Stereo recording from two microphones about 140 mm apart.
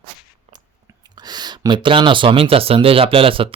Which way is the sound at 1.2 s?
30° right (ahead or behind).